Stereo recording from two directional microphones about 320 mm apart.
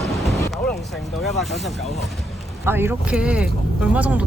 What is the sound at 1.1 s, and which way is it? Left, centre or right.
Speech, centre.